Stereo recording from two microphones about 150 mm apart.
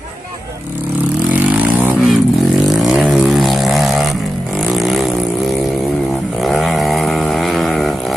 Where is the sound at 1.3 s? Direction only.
10° right (ahead or behind).